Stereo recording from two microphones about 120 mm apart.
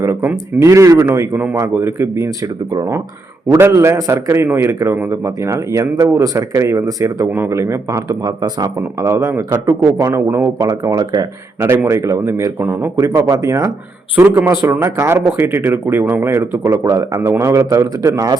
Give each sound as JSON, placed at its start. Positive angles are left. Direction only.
{"t": 0.0, "sound": "speech", "side_deg": -20}
{"t": 11.6, "sound": "speech", "side_deg": -25}
{"t": 13.1, "sound": "speech", "side_deg": -30}